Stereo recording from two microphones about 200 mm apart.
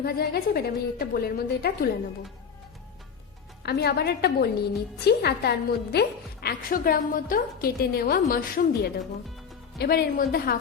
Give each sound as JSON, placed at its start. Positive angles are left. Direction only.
{"t": 0.0, "sound": "a woman's voice", "side_deg": 50}
{"t": 3.6, "sound": "a woman's voice", "side_deg": 50}